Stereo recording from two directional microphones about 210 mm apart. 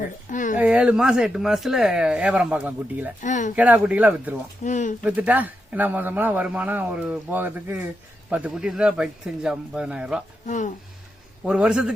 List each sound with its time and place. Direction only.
0.3 s speech: 35° left (ahead or behind)
0.6 s speech: 5° right (ahead or behind)
3.2 s speech: 35° left (ahead or behind)
3.5 s a man's voice: 5° right (ahead or behind)
4.6 s speech: 35° left (ahead or behind)
5.0 s a man's voice: 5° right (ahead or behind)
10.4 s speech: 35° left (ahead or behind)
11.4 s speech: 5° right (ahead or behind)